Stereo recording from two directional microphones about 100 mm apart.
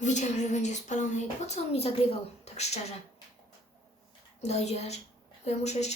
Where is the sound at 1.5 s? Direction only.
90° left.